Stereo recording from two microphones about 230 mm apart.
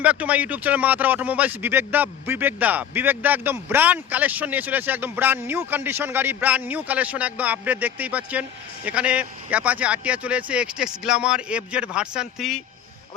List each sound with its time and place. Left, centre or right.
0.0 s speech: centre